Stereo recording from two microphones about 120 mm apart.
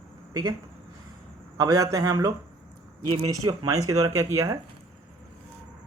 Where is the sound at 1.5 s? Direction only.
30° right (ahead or behind).